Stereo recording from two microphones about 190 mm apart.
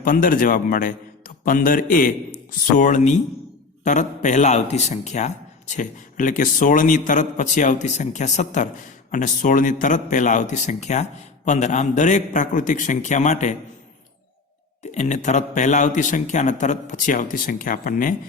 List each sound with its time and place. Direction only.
0.0 s a man's voice: 45° left (ahead or behind)
14.9 s speech: 40° left (ahead or behind)